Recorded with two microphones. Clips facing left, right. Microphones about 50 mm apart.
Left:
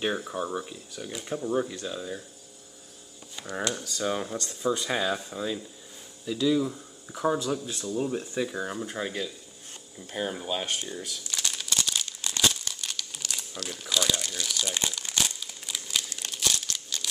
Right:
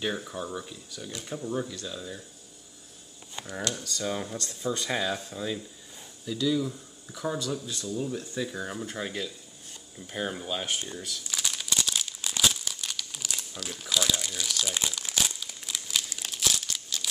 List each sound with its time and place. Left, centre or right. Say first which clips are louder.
0.0 s speech: left 3 dB; centre
3.5 s speech: left 3 dB; centre
6.2 s speech: left 2 dB; left
11.2 s crumpling: even; centre